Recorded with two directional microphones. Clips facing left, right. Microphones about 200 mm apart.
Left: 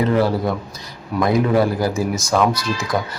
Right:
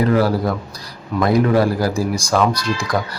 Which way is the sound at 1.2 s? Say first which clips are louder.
Right 1 dB; centre (ahead or behind).